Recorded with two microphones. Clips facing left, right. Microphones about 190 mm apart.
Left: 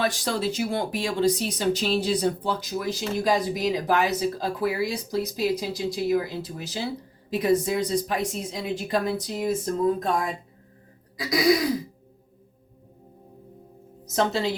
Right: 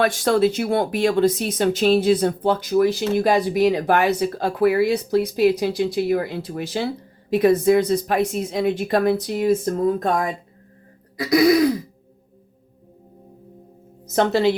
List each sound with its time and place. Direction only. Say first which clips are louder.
0.0 s speech: right 8 dB; 55° right (ahead or behind)
11.2 s throat clearing: right 6 dB; 50° right (ahead or behind)
14.2 s speech: right 7 dB; 65° right (ahead or behind)